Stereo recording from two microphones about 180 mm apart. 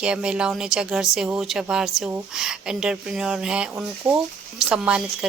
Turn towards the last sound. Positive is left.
turn(degrees=-5)  # may be behind; listen again after turning